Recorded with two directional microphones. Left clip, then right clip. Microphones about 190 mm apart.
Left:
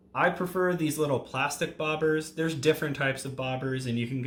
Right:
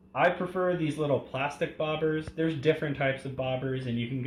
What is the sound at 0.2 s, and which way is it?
Speech, 30° left (ahead or behind).